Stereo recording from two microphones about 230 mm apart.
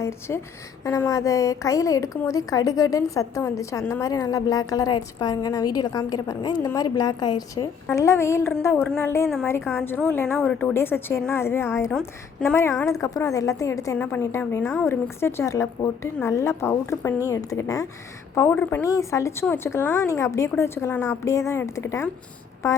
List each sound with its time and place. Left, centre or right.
0.0 s a woman's voice: centre